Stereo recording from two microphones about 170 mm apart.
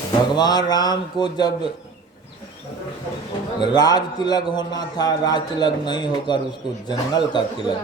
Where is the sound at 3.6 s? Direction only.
25° left (ahead or behind).